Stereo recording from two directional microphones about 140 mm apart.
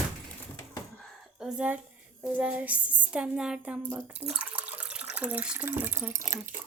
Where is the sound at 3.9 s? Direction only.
10° right (ahead or behind).